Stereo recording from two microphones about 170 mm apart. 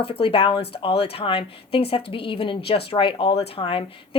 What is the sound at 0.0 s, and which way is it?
A woman's voice, 30° left (ahead or behind).